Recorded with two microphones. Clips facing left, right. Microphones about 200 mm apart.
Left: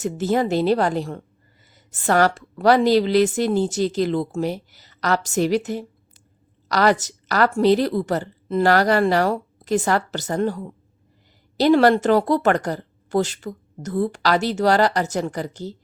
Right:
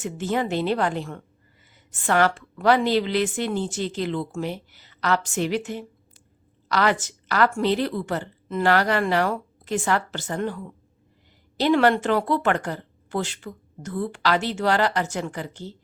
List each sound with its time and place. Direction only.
0.0 s speech: 40° left (ahead or behind)